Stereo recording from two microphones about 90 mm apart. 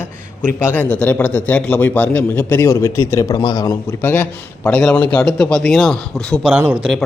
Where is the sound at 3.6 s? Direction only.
30° left (ahead or behind).